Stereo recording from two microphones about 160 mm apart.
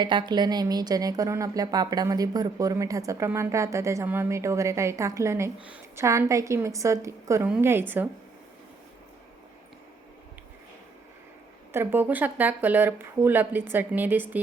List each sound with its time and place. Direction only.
0.0 s a woman's voice: 30° right (ahead or behind); by 6.1 s 10° right (ahead or behind)
6.1 s speech: 20° right (ahead or behind)
11.7 s speech: 15° right (ahead or behind)